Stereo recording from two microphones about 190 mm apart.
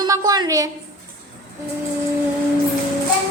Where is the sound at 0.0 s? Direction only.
20° right (ahead or behind).